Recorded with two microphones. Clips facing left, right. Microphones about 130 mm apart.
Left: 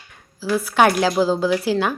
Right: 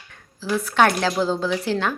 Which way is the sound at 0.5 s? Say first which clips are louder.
Left 2 dB; 10° left (ahead or behind).